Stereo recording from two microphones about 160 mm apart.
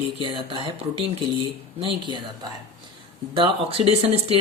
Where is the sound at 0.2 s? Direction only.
30° right (ahead or behind).